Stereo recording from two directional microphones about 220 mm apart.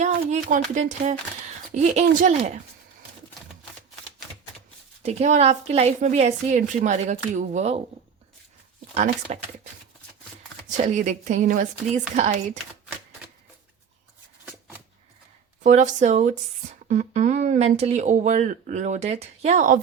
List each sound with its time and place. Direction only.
0.0 s speech: 35° right (ahead or behind)
5.0 s speech: 30° right (ahead or behind)
9.3 s speech: 30° right (ahead or behind)
10.8 s speech: 30° right (ahead or behind)
15.6 s speech: 35° right (ahead or behind)